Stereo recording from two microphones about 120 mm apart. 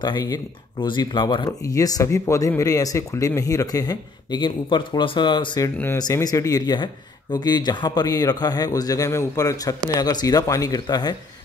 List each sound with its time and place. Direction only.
0.0 s speech: 35° left (ahead or behind)